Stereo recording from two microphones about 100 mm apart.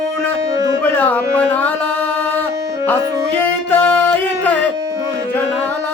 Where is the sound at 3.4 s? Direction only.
20° left (ahead or behind).